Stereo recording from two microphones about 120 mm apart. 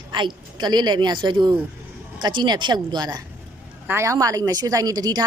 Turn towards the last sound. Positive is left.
turn(degrees=-30)  # may be behind; listen again after turning